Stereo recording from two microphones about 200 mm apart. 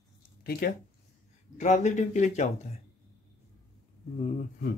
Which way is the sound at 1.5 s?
35° left (ahead or behind).